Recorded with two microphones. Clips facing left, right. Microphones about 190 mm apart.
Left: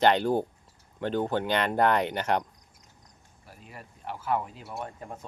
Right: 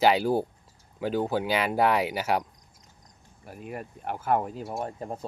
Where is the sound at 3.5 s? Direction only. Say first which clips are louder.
Right 10 dB; 55° right (ahead or behind); by 5.3 s 35° right (ahead or behind).